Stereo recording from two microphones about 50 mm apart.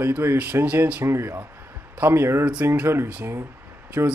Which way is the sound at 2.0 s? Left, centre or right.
Right.